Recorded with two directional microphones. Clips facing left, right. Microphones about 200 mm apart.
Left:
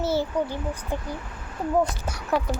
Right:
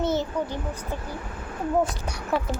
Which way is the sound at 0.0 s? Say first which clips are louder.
Even; 10° left (ahead or behind).